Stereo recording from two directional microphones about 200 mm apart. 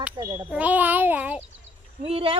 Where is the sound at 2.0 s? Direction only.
30° right (ahead or behind).